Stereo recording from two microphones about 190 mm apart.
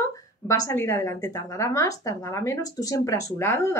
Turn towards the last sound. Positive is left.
turn(degrees=15)  # may be behind; listen again after turning